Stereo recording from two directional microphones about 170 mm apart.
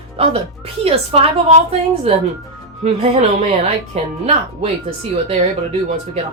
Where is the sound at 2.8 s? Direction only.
40° right (ahead or behind).